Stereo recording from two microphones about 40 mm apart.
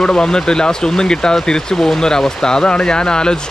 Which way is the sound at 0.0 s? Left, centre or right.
Centre.